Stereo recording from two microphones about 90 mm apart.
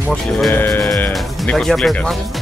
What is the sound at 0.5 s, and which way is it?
Speech, 20° left (ahead or behind).